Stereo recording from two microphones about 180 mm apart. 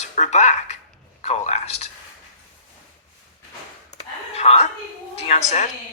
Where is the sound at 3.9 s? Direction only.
35° left (ahead or behind).